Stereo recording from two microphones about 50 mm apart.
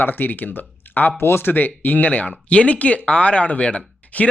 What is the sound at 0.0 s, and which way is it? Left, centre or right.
Speech, left.